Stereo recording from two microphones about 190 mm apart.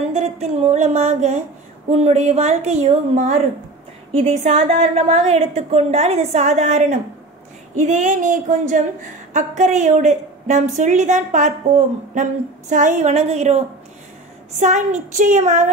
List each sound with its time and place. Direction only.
0.1 s a sound: 35° right (ahead or behind)
1.9 s a woman's voice: 35° right (ahead or behind)
14.6 s a woman's voice: 40° right (ahead or behind)